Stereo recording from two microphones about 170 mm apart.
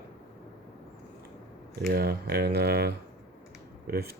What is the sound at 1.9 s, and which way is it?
Speech, 65° right (ahead or behind).